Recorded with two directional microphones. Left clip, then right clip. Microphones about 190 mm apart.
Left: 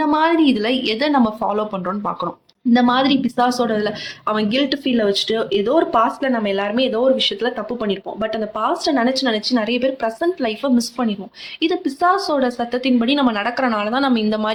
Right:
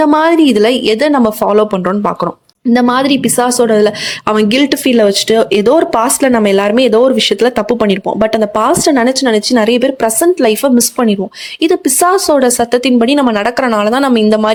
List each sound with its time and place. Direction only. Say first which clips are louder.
0.0 s a woman's voice: right 7 dB; 55° right (ahead or behind)